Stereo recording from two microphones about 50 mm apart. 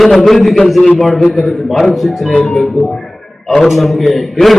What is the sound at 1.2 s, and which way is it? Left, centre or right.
Speech, centre.